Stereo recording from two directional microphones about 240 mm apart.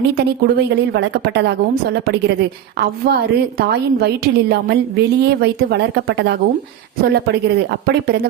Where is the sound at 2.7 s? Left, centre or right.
Right.